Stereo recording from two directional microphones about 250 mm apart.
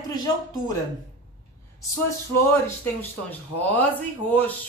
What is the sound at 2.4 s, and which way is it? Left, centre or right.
Speech, centre.